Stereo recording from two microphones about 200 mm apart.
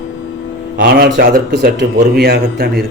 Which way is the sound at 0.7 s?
50° right (ahead or behind).